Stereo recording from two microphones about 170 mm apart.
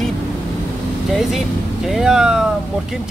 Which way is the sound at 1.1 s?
Centre (ahead or behind).